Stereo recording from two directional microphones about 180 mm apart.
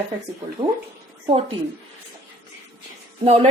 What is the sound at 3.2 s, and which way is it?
Speech, 35° right (ahead or behind).